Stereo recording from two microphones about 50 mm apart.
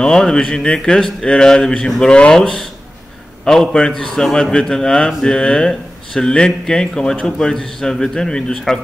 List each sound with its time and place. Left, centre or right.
0.0 s speech: centre
2.3 s speech: centre